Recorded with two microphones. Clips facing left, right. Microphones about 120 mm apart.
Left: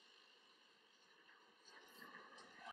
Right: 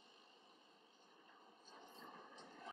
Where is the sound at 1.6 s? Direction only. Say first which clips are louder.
Right 4 dB; 30° right (ahead or behind).